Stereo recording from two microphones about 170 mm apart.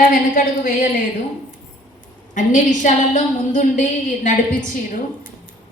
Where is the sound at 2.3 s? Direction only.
45° left (ahead or behind).